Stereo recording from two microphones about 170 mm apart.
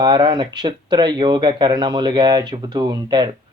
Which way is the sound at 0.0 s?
25° right (ahead or behind).